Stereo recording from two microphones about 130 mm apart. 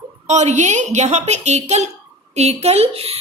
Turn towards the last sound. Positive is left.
turn(degrees=-50)  # may be behind; listen again after turning